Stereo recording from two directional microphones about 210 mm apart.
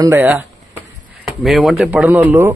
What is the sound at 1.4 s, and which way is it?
A man's voice, centre (ahead or behind).